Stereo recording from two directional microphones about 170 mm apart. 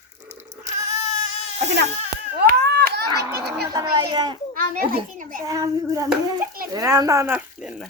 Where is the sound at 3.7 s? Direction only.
25° right (ahead or behind).